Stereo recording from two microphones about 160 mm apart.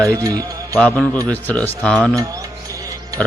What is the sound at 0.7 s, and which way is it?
A man's voice, 5° left (ahead or behind).